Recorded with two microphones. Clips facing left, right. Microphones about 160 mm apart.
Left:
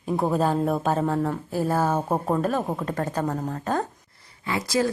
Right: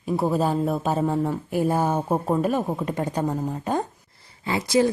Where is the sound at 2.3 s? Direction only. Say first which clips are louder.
Right 2 dB; 10° right (ahead or behind).